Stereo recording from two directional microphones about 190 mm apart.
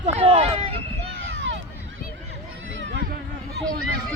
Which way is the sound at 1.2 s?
80° right.